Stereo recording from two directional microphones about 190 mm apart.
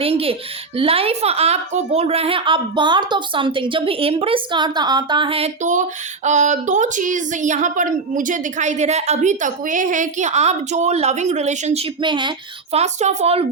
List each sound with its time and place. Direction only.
0.0 s a woman's voice: 30° right (ahead or behind)
12.7 s a woman's voice: 35° right (ahead or behind)